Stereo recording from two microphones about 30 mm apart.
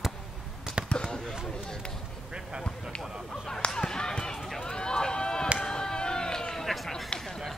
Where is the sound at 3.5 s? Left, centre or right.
Left.